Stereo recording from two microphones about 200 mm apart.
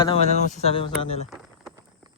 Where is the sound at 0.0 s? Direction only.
30° left (ahead or behind).